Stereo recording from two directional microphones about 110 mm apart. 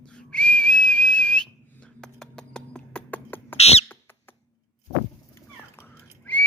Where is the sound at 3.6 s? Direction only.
75° left (ahead or behind).